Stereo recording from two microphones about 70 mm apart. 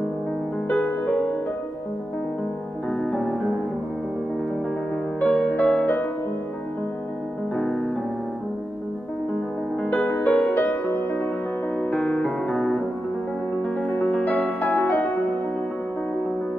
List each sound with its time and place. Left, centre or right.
0.7 s music: centre
2.9 s music: centre
5.2 s music: centre
7.5 s music: centre
9.8 s music: centre
12.4 s music: centre
14.2 s music: left